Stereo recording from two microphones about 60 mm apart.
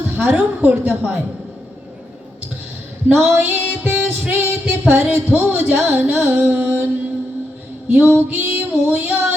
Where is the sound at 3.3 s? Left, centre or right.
Right.